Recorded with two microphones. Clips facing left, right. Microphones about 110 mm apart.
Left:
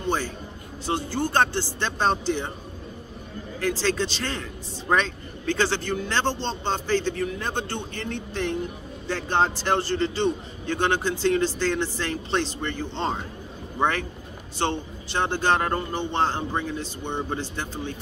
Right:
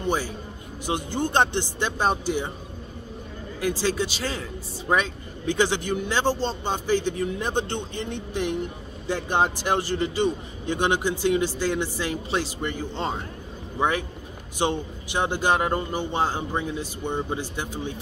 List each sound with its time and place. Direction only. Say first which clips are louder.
0.0 s a man's voice: right 1 dB; 10° right (ahead or behind)
3.6 s a man's voice: even; 10° right (ahead or behind)